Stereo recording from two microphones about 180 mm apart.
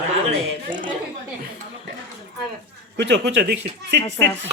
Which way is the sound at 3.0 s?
70° right (ahead or behind).